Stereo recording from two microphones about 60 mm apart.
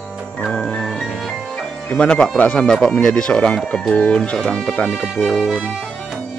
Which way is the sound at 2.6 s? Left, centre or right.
Centre.